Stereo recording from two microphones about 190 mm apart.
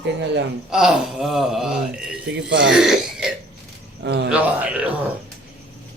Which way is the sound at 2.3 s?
70° right (ahead or behind).